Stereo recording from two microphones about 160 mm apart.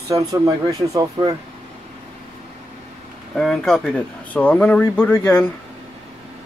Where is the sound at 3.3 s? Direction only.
5° left (ahead or behind).